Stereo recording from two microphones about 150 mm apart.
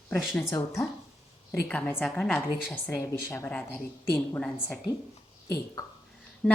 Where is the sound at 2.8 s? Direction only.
20° left (ahead or behind).